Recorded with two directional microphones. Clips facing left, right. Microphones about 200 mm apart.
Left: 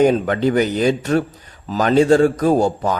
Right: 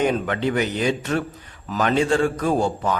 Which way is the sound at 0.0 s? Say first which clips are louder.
Left 6 dB; 40° left (ahead or behind).